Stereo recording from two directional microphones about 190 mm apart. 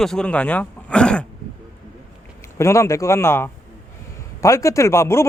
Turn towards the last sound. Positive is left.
turn(degrees=15)  # may be behind; listen again after turning